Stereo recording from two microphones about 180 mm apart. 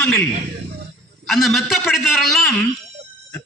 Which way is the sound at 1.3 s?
Centre (ahead or behind).